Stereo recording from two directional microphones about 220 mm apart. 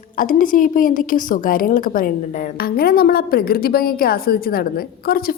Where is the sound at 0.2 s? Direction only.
40° left (ahead or behind).